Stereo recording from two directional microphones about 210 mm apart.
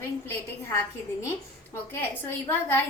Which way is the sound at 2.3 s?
10° left (ahead or behind).